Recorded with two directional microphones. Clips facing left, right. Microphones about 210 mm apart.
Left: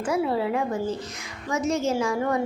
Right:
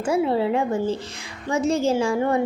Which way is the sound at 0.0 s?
25° right (ahead or behind).